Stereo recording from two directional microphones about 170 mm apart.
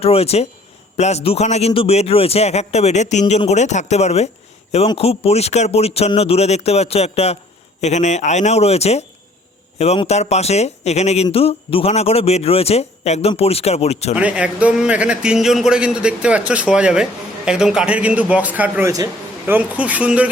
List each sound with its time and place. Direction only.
0.0 s speech: 35° left (ahead or behind)
14.2 s a man's voice: 5° right (ahead or behind)